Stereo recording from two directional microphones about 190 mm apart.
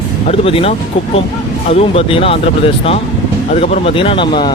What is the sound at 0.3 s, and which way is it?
Speech, 30° left (ahead or behind).